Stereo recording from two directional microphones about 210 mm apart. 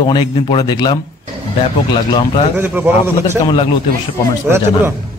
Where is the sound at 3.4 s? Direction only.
25° left (ahead or behind).